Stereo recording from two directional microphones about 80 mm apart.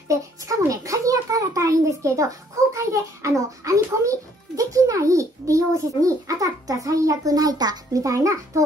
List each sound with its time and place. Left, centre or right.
0.1 s a child's voice: right
8.0 s a child's voice: right